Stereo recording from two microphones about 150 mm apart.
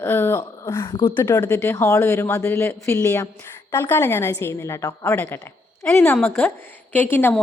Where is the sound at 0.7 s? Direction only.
30° left (ahead or behind).